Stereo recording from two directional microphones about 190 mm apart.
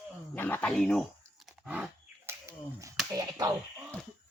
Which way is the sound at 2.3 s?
15° right (ahead or behind).